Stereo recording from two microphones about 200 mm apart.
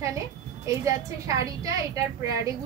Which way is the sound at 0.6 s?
15° right (ahead or behind).